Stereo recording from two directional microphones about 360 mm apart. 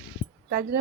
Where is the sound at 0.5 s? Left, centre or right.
Right.